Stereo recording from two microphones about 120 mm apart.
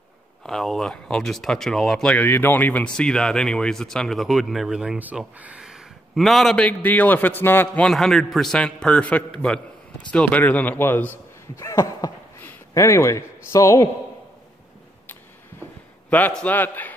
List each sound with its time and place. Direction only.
0.5 s a man's voice: centre (ahead or behind); by 13.8 s 25° left (ahead or behind)
16.1 s speech: 15° left (ahead or behind)